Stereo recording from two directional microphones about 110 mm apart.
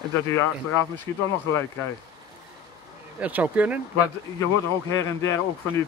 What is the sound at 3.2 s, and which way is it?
Speech, 15° right (ahead or behind).